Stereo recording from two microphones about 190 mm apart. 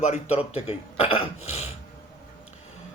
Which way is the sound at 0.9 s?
30° left (ahead or behind).